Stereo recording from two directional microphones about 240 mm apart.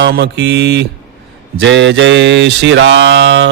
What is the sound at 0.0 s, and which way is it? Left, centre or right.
Speech, right.